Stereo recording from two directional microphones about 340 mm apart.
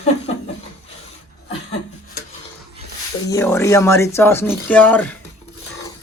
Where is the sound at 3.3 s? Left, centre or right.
Centre.